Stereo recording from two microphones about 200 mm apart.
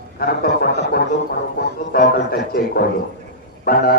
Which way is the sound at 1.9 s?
50° left (ahead or behind).